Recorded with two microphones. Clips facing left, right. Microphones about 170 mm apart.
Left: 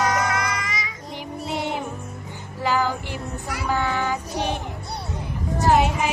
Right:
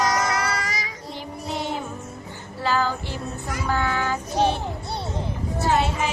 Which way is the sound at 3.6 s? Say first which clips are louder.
Left 1 dB; 15° left (ahead or behind).